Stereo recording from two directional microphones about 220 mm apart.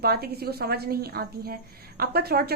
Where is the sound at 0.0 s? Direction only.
45° right (ahead or behind).